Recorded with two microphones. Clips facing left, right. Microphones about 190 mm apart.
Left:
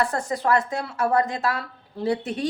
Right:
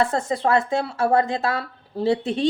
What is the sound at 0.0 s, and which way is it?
Speech, 25° right (ahead or behind).